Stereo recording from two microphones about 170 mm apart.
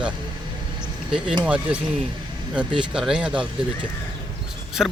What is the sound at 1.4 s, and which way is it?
Speech, 5° right (ahead or behind).